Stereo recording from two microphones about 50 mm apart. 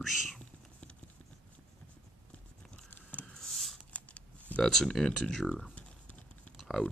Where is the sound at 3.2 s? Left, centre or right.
Centre.